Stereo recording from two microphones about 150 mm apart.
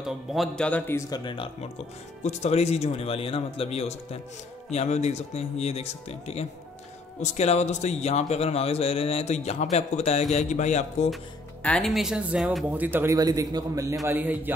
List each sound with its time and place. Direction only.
0.0 s a man's voice: centre (ahead or behind)
1.1 s speech: 35° left (ahead or behind)
2.2 s speech: 45° left (ahead or behind)
11.6 s speech: 5° left (ahead or behind); by 13.9 s 25° right (ahead or behind)
14.0 s speech: 10° right (ahead or behind)